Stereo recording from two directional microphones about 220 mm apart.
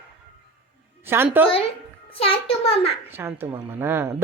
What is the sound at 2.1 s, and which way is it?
Speech, 25° left (ahead or behind).